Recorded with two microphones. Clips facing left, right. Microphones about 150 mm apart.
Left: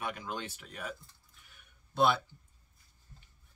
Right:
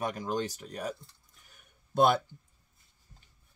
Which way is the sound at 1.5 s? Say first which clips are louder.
Right 3 dB; 45° right (ahead or behind).